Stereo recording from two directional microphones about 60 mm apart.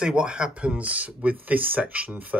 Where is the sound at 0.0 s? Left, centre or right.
Centre.